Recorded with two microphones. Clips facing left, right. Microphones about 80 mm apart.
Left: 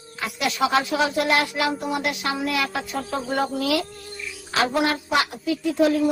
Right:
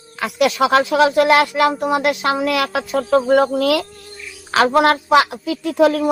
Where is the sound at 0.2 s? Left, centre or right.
Right.